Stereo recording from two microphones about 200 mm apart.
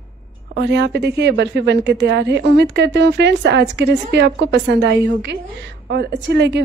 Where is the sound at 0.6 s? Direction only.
60° right (ahead or behind).